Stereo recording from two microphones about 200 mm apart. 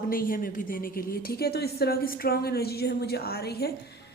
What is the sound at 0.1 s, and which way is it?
A woman's voice, 45° left (ahead or behind).